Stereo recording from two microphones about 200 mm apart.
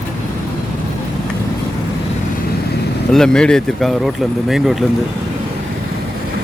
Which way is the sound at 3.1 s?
5° left (ahead or behind).